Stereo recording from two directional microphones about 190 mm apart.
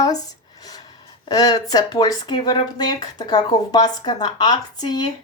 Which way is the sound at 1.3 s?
20° left (ahead or behind).